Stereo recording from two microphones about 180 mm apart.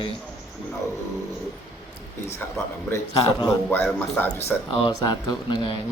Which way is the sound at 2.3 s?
10° left (ahead or behind).